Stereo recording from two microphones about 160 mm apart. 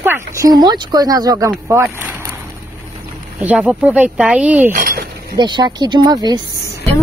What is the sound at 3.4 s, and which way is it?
Speech, 10° right (ahead or behind).